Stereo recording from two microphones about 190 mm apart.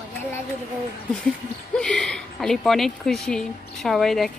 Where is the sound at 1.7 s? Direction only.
5° left (ahead or behind).